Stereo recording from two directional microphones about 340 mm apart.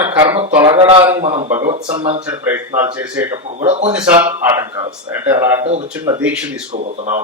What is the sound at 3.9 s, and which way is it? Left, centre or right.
Speech, centre.